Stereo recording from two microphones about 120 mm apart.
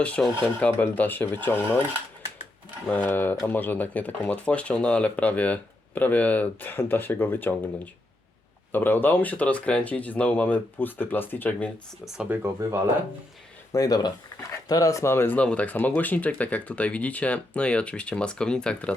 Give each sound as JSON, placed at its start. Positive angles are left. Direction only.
{"t": 0.0, "sound": "speech", "side_deg": 10}
{"t": 2.8, "sound": "speech", "side_deg": 15}
{"t": 8.7, "sound": "speech", "side_deg": 15}
{"t": 12.0, "sound": "speech", "side_deg": -5}
{"t": 12.4, "sound": "speech", "side_deg": -20}
{"t": 13.7, "sound": "speech", "side_deg": 30}